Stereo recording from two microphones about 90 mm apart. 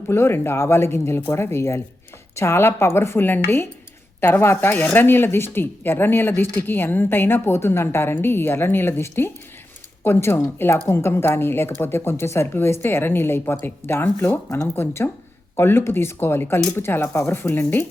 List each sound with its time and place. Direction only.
0.1 s speech: 25° left (ahead or behind)